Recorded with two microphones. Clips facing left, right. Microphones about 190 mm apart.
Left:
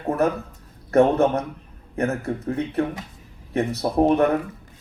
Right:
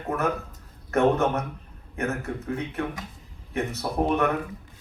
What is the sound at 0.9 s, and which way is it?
Speech, 35° left (ahead or behind).